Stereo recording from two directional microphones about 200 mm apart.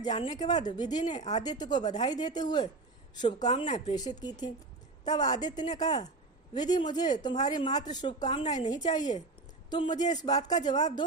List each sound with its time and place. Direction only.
0.1 s speech: 25° left (ahead or behind)
1.2 s speech: 35° left (ahead or behind)
1.5 s speech: 20° left (ahead or behind)